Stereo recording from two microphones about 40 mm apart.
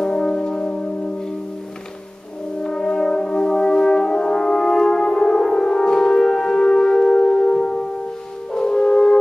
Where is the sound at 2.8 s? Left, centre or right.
Left.